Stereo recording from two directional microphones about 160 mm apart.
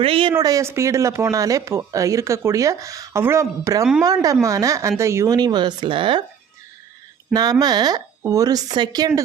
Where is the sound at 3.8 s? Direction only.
Centre (ahead or behind).